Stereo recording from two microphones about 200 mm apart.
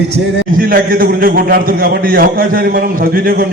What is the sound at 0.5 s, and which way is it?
A man's voice, 45° right (ahead or behind).